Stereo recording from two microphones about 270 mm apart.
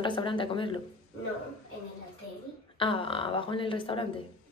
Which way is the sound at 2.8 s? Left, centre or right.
Centre.